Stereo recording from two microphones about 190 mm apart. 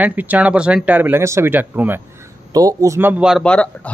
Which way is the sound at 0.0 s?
10° right (ahead or behind).